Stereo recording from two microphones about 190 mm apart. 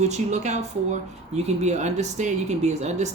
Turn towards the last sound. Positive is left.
turn(degrees=-35)  # may be behind; listen again after turning